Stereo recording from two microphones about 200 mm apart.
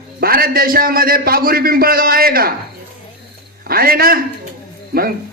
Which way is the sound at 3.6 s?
50° right (ahead or behind).